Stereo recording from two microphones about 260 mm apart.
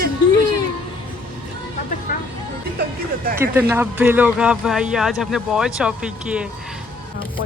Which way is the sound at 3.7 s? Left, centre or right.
Centre.